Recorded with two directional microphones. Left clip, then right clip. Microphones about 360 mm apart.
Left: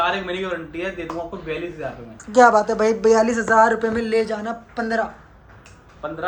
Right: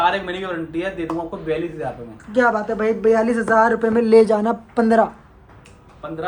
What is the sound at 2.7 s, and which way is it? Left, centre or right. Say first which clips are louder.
A man's voice: left 1 dB; centre.